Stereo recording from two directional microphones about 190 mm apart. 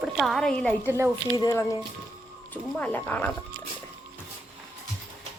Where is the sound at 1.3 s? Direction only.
15° left (ahead or behind).